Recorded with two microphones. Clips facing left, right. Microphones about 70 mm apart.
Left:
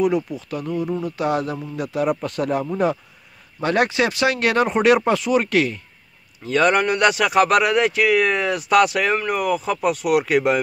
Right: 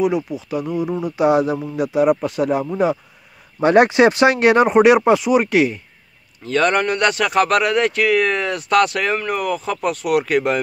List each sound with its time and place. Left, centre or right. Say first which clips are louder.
0.0 s a man's voice: right 1 dB; centre
3.6 s a man's voice: right 7 dB; right
6.4 s speech: even; centre